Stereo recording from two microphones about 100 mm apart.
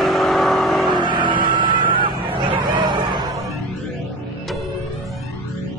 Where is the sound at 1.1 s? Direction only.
50° right (ahead or behind).